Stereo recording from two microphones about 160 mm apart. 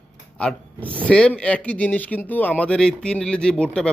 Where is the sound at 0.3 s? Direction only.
10° left (ahead or behind).